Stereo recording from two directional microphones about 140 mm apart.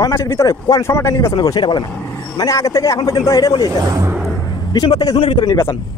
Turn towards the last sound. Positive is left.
turn(degrees=35)  # may be behind; listen again after turning